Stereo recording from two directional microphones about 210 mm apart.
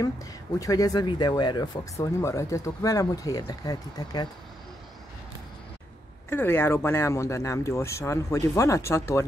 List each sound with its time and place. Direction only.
0.6 s speech: 15° left (ahead or behind)
6.3 s speech: 10° left (ahead or behind)